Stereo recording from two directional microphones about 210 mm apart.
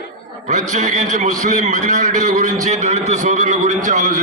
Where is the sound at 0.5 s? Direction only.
35° right (ahead or behind).